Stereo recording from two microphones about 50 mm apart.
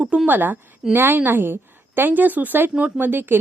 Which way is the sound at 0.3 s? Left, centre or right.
Right.